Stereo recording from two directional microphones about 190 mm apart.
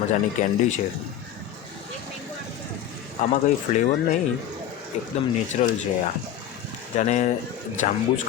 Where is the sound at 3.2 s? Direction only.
40° left (ahead or behind).